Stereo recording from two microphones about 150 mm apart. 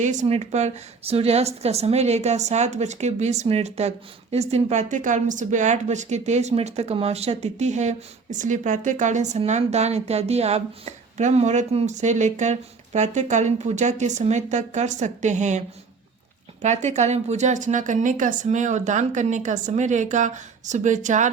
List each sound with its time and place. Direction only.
0.0 s a woman's voice: 50° right (ahead or behind)